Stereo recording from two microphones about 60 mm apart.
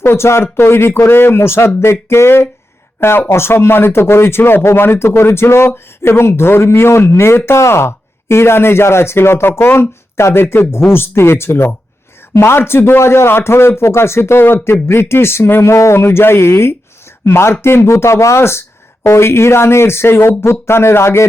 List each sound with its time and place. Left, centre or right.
0.0 s speech: left